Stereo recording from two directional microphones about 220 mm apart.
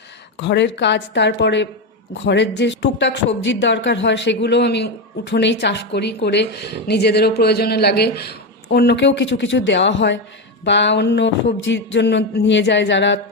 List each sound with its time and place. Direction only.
0.3 s speech: 50° left (ahead or behind)